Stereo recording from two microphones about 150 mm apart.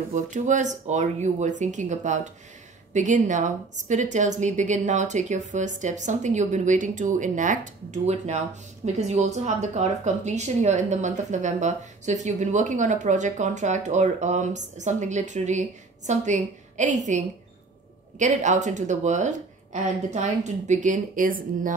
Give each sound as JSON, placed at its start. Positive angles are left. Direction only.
{"t": 0.1, "sound": "a woman's voice", "side_deg": -55}
{"t": 18.2, "sound": "a woman's voice", "side_deg": -55}